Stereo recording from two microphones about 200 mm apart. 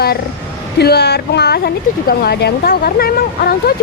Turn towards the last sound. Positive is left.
turn(degrees=50)  # may be behind; listen again after turning